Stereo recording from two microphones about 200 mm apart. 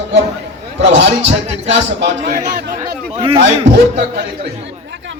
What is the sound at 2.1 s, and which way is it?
Speech, 35° right (ahead or behind).